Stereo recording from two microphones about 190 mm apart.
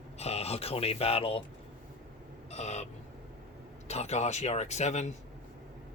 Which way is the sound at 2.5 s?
35° left (ahead or behind).